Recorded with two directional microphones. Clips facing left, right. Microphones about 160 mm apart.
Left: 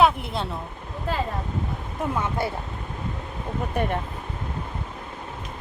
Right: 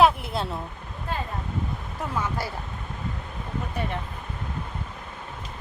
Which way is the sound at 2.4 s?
25° left (ahead or behind).